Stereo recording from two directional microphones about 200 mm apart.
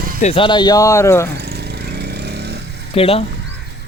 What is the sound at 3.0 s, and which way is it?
Speech, 30° left (ahead or behind).